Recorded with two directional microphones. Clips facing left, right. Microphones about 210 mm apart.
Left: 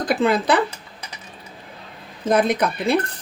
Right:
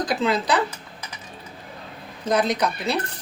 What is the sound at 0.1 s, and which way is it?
Speech, 55° left (ahead or behind).